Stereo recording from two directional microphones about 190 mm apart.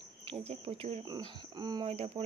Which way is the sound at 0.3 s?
30° right (ahead or behind).